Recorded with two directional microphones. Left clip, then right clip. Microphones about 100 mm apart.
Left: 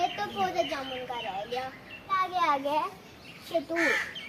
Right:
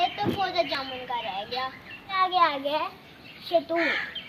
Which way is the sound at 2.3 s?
45° left (ahead or behind).